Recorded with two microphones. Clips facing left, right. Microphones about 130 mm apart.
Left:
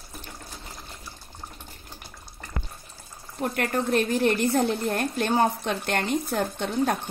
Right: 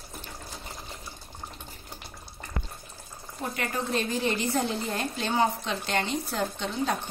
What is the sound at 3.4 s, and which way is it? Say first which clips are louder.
A woman's voice: left 5 dB; 55° left (ahead or behind).